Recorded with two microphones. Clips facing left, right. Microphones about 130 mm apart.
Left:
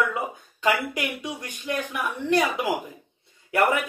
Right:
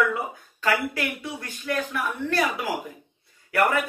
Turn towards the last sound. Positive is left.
turn(degrees=20)  # may be behind; listen again after turning